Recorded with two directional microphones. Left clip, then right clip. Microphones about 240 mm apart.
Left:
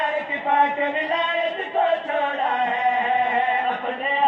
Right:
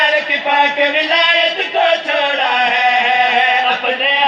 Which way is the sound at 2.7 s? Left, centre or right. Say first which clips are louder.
Right 8 dB; right.